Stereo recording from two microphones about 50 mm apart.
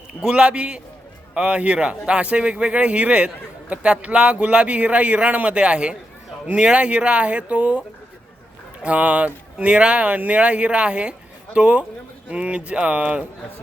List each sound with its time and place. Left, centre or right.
0.2 s a man's voice: centre